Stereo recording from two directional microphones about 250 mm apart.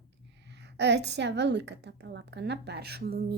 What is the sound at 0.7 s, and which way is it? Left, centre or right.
A woman's voice, right.